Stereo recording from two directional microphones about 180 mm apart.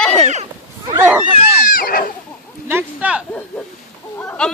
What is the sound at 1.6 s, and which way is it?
Goat, 50° left (ahead or behind).